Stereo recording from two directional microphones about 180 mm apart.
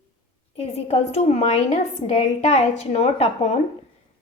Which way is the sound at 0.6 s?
35° left (ahead or behind).